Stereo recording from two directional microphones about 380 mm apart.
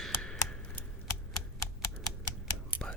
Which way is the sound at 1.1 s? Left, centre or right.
Left.